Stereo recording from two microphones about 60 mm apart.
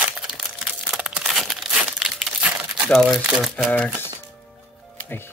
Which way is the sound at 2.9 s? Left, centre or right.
Centre.